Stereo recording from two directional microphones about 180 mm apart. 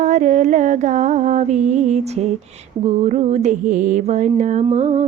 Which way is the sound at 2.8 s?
40° right (ahead or behind).